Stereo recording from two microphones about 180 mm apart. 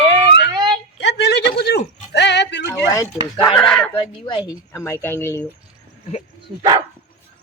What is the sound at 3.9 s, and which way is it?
Speech, 25° left (ahead or behind).